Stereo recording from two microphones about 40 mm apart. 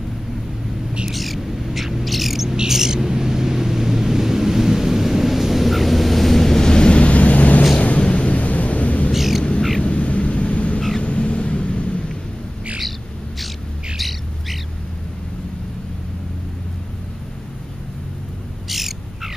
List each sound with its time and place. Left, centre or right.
1.1 s bird: centre
2.7 s vehicle: centre; by 7.6 s left
8.0 s a sound: left
8.3 s thunder: left
9.1 s crow: centre
9.8 s a sound: left
13.9 s bird: centre
18.7 s bird: centre